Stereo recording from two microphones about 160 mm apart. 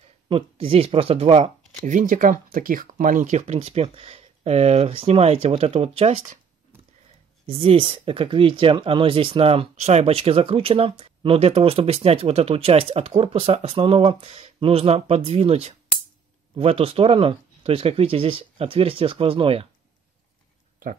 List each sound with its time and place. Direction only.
0.3 s speech: 35° right (ahead or behind)
1.9 s speech: 55° right (ahead or behind)
7.4 s speech: 35° right (ahead or behind)